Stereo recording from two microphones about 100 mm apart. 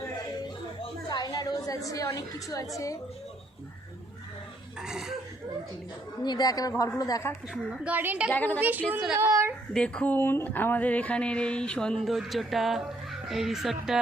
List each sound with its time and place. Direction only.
0.8 s a sound: 45° left (ahead or behind)
2.7 s speech: 35° left (ahead or behind)
4.8 s speech: 5° right (ahead or behind)
6.2 s speech: 40° left (ahead or behind)
7.5 s a woman's voice: 10° right (ahead or behind)
8.3 s speech: 15° left (ahead or behind)
8.6 s a woman's voice: 20° right (ahead or behind)
9.1 s a woman's voice: 30° right (ahead or behind)
9.7 s speech: 10° left (ahead or behind)